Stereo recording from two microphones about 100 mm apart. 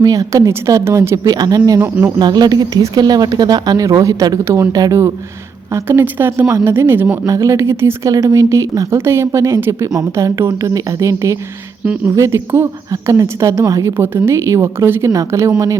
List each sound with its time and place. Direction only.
0.0 s speech: 35° right (ahead or behind)
1.8 s a woman's voice: 20° right (ahead or behind)
2.1 s a woman's voice: 45° right (ahead or behind); by 12.6 s 25° right (ahead or behind)
12.9 s a woman's voice: 35° right (ahead or behind)